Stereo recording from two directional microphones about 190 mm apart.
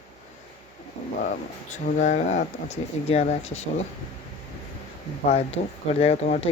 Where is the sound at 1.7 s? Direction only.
40° left (ahead or behind).